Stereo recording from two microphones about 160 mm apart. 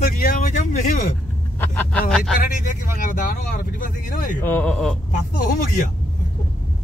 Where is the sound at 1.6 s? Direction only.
10° left (ahead or behind).